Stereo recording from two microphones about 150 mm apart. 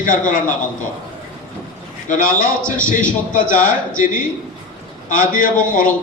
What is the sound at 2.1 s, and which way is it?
A man's voice, 65° left (ahead or behind).